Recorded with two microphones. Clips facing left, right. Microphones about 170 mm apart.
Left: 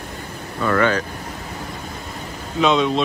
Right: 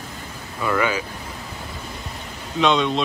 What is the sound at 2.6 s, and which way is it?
Speech, centre (ahead or behind).